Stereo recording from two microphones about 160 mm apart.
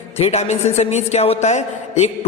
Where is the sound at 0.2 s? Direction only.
45° left (ahead or behind).